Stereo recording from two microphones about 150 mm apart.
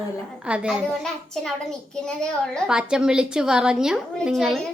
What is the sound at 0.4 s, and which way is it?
A child's voice, 5° right (ahead or behind).